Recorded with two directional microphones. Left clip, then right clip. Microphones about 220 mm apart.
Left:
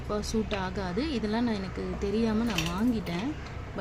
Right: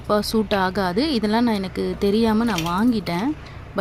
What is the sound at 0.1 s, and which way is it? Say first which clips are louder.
Speech: right 11 dB; 35° right (ahead or behind).